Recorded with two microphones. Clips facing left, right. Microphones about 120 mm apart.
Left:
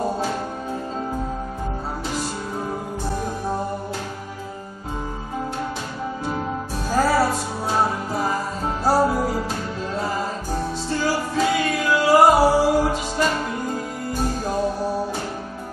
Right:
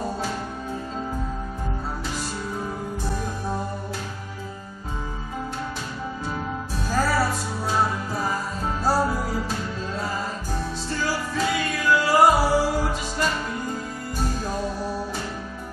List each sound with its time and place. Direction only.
6.9 s music: 25° left (ahead or behind)